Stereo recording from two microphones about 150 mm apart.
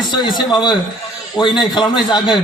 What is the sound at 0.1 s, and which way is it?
Speech, 30° left (ahead or behind).